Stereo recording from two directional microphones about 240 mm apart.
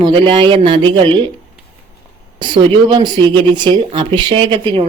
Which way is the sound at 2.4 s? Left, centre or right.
Centre.